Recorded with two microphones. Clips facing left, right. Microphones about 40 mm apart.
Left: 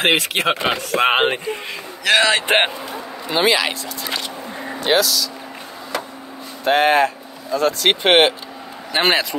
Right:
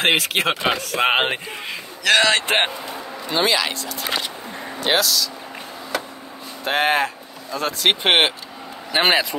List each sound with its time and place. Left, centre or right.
0.0 s a man's voice: centre
2.4 s a man's voice: left
3.3 s a man's voice: centre
6.6 s speech: centre